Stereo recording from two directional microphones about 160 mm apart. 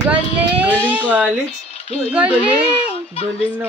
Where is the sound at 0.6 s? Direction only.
10° right (ahead or behind).